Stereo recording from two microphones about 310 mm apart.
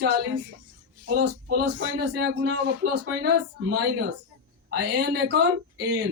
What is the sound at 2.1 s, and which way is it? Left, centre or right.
Speech, right.